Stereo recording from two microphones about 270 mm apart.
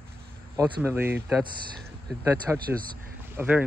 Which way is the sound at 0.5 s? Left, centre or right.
Centre.